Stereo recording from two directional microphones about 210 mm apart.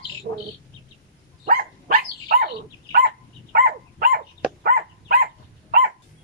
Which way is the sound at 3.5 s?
40° right (ahead or behind).